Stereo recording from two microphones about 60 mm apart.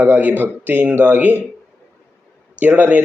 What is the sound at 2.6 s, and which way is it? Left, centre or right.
Speech, right.